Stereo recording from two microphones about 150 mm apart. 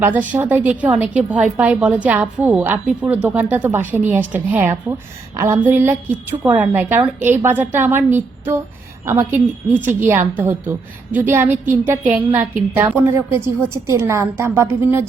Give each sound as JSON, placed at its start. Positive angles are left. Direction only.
{"t": 0.0, "sound": "a woman's voice", "side_deg": -10}